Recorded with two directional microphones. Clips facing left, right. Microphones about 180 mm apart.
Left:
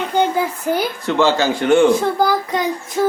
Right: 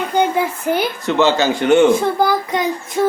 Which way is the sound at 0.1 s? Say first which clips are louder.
Right 1 dB; 15° right (ahead or behind).